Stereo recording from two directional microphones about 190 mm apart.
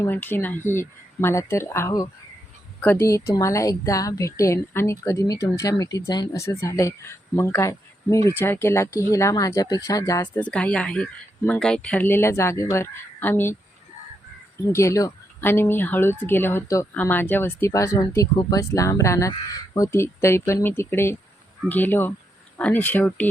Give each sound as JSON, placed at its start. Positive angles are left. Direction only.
{"t": 0.0, "sound": "speech", "side_deg": 10}
{"t": 3.1, "sound": "speech", "side_deg": 15}
{"t": 10.4, "sound": "speech", "side_deg": 5}
{"t": 14.7, "sound": "speech", "side_deg": 15}